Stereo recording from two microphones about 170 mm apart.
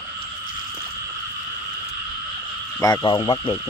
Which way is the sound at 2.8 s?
25° left (ahead or behind).